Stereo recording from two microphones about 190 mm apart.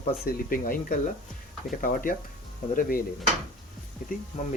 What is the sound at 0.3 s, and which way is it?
Speech, 50° left (ahead or behind).